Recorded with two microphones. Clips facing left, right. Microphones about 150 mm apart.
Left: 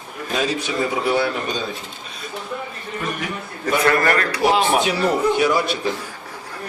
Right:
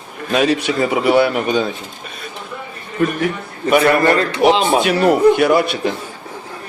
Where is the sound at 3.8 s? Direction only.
25° right (ahead or behind).